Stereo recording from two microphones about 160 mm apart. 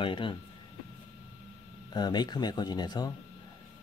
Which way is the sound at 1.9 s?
25° left (ahead or behind).